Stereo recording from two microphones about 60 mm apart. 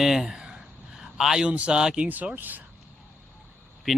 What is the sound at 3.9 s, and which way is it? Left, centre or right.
Speech, centre.